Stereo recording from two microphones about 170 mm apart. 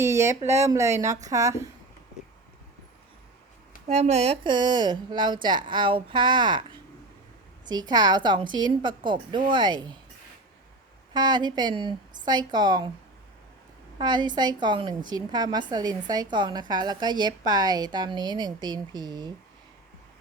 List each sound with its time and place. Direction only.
0.0 s speech: 15° right (ahead or behind)
3.8 s a woman's voice: 40° right (ahead or behind)
11.1 s a woman's voice: 25° right (ahead or behind)
14.0 s a woman's voice: 25° right (ahead or behind)